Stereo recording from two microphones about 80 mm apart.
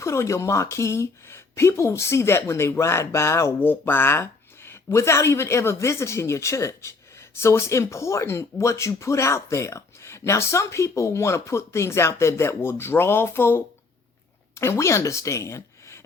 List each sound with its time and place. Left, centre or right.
0.0 s speech: left
3.6 s a woman's voice: left